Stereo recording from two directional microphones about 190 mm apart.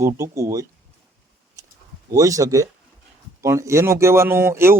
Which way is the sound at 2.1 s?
15° right (ahead or behind).